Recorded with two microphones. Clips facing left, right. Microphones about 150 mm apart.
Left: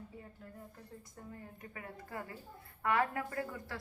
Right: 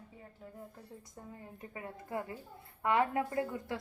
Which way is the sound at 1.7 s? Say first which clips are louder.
Right 6 dB; 20° right (ahead or behind).